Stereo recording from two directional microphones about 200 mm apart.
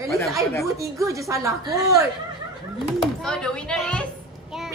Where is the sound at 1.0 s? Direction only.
15° right (ahead or behind).